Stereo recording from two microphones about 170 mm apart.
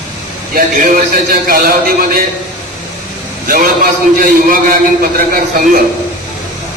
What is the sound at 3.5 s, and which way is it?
A man's voice, 55° right (ahead or behind).